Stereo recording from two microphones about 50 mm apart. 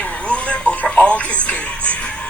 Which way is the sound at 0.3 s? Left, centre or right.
Left.